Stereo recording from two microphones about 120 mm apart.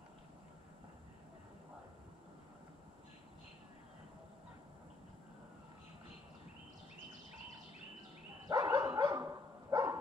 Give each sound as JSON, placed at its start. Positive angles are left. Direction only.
{"t": 8.5, "sound": "dog", "side_deg": -30}